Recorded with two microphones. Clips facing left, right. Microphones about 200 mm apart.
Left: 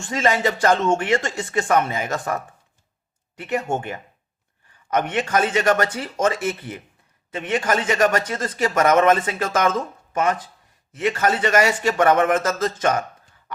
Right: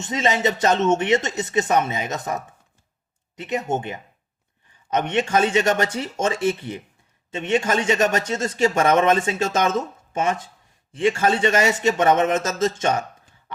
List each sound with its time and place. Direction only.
0.0 s speech: 20° right (ahead or behind)